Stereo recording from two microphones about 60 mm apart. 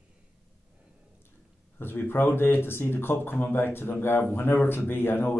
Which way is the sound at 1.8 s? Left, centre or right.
Left.